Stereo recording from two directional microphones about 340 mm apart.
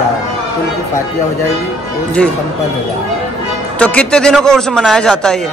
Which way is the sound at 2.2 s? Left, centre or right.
Centre.